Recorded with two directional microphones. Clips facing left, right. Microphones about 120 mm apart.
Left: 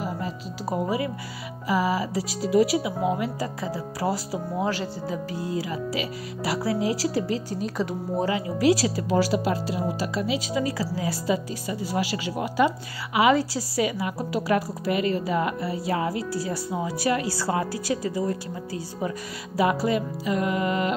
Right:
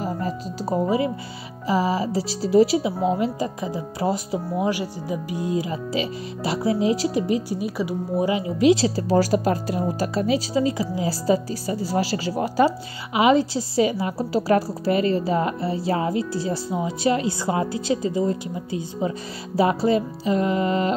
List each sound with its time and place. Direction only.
0.7 s speech: 25° right (ahead or behind); by 8.3 s 10° right (ahead or behind)
8.3 s speech: 20° right (ahead or behind); by 10.6 s 40° right (ahead or behind)
10.6 s speech: 20° right (ahead or behind)
11.1 s speech: 35° right (ahead or behind)
13.1 s speech: 25° right (ahead or behind)